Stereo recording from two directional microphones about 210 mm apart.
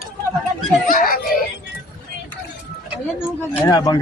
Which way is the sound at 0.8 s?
40° left (ahead or behind).